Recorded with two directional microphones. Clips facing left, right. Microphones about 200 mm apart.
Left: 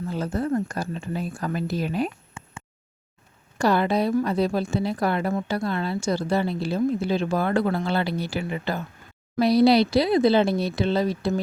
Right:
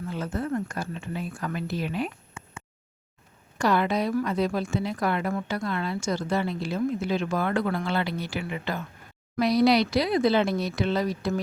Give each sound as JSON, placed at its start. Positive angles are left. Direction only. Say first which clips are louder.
{"t": 0.1, "sound": "a woman's voice", "louder": "left 4 dB", "side_deg": 35}